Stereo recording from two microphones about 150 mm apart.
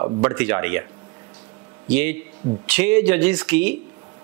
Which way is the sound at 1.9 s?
10° right (ahead or behind).